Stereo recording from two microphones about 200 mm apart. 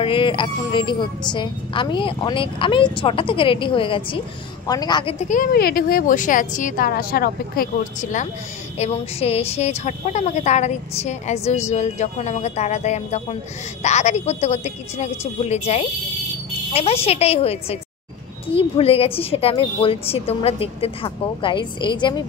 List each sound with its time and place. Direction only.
0.0 s a woman's voice: 25° left (ahead or behind)
5.3 s a woman's voice: 45° left (ahead or behind); by 22.2 s 25° left (ahead or behind)